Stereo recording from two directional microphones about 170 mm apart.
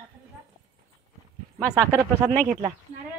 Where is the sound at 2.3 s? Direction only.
45° right (ahead or behind).